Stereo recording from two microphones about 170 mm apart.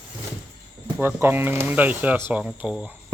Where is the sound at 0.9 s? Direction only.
10° right (ahead or behind).